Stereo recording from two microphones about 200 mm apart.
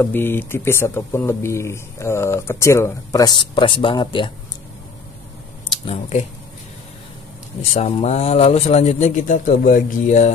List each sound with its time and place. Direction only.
0.0 s speech: 10° left (ahead or behind)
5.7 s speech: 30° left (ahead or behind)
7.7 s speech: 30° left (ahead or behind)